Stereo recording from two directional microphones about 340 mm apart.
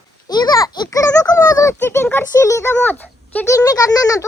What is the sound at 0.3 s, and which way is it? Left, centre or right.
A child's voice, centre.